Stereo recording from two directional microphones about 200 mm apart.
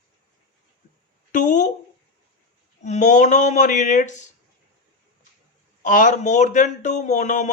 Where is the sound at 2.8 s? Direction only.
35° left (ahead or behind).